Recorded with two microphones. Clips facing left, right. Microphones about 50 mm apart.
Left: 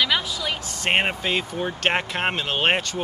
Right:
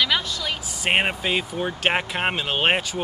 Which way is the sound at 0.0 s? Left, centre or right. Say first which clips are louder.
Even; centre.